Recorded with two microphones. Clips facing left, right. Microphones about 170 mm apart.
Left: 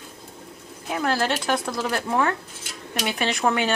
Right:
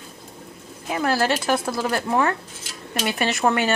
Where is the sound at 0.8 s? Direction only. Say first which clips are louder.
Right 2 dB; 5° right (ahead or behind).